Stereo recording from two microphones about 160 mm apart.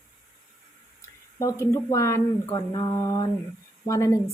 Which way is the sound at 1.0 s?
20° left (ahead or behind).